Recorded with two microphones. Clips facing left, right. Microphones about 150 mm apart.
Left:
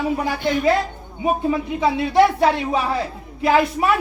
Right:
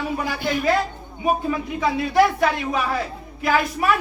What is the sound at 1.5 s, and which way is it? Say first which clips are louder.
Speech: left 3 dB; 25° left (ahead or behind).